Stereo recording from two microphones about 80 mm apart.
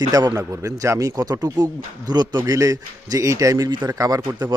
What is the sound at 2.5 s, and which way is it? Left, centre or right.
Speech, right.